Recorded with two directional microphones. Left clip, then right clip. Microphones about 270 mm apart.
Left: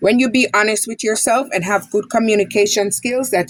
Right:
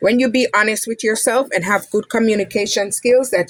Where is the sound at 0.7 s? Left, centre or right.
Centre.